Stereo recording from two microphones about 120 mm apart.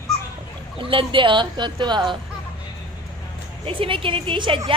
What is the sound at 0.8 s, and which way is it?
Speech, 45° right (ahead or behind).